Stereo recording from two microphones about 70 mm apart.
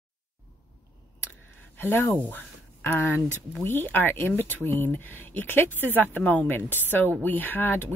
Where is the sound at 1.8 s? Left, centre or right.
Left.